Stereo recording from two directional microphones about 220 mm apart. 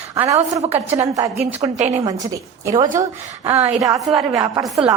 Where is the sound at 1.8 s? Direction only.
30° right (ahead or behind).